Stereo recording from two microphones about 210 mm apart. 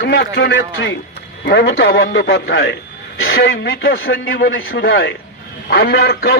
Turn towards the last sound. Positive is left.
turn(degrees=45)  # may be behind; listen again after turning